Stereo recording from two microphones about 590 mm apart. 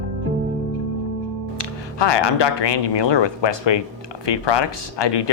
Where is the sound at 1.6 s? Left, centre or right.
Left.